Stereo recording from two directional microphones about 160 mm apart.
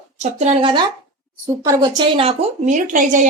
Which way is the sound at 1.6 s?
25° right (ahead or behind).